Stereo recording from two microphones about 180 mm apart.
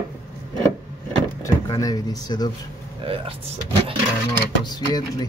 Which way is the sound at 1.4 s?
20° left (ahead or behind).